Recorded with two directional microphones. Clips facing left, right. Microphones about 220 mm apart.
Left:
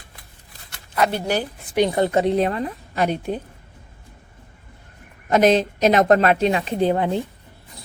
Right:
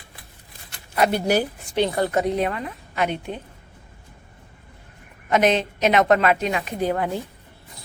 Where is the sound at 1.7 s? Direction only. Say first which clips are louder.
Left 3 dB; 15° left (ahead or behind); by 3.4 s 40° left (ahead or behind).